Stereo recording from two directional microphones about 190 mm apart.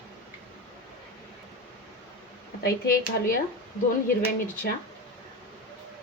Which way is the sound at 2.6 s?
50° left (ahead or behind).